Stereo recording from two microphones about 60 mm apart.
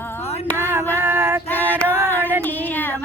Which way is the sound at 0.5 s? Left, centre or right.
Right.